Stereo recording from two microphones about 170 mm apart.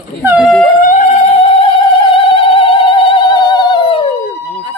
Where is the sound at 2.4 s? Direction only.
30° left (ahead or behind).